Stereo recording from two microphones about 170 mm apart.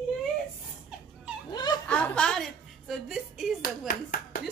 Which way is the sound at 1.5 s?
25° left (ahead or behind).